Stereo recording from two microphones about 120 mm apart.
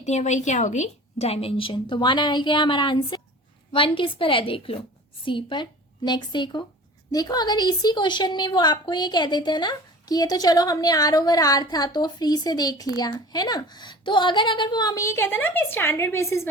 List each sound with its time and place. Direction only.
0.0 s a woman's voice: 70° left (ahead or behind); by 16.5 s 20° left (ahead or behind)